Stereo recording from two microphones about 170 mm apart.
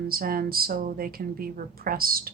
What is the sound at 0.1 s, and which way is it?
A woman's voice, 60° right (ahead or behind).